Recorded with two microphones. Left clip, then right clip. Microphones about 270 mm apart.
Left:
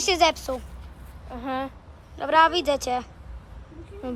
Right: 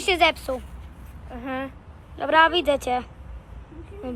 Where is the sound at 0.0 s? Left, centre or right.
Centre.